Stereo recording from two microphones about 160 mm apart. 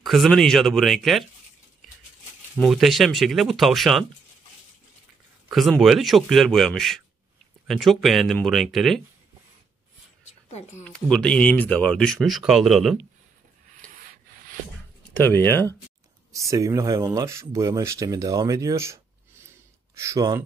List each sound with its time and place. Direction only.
0.0 s speech: centre (ahead or behind)
2.5 s speech: centre (ahead or behind)
5.5 s speech: centre (ahead or behind)
10.8 s speech: 5° left (ahead or behind)
15.1 s speech: 15° left (ahead or behind)
16.3 s speech: 20° right (ahead or behind)